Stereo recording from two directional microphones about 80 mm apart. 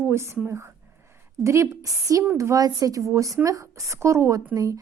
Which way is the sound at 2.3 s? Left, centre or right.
Right.